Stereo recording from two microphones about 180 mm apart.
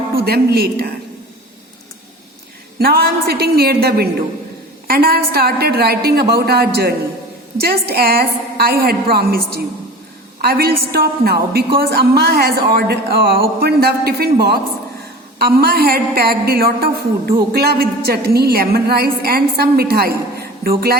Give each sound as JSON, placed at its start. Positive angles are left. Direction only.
{"t": 0.2, "sound": "a woman's voice", "side_deg": -60}
{"t": 2.7, "sound": "a woman's voice", "side_deg": -60}